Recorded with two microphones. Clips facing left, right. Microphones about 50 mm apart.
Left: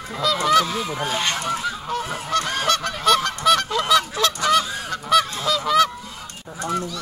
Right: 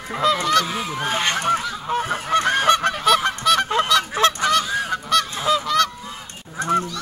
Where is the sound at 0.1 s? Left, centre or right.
Right.